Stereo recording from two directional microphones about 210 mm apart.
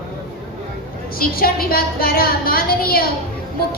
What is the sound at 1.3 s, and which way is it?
A woman's voice, 45° left (ahead or behind).